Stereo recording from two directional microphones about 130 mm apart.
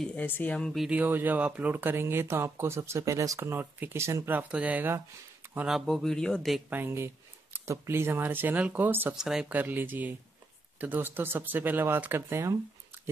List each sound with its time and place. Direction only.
0.0 s speech: 10° left (ahead or behind)
0.8 s speech: 15° right (ahead or behind)
5.7 s a man's voice: centre (ahead or behind)
6.7 s speech: 15° right (ahead or behind)
9.1 s speech: 5° right (ahead or behind); by 12.5 s 20° right (ahead or behind)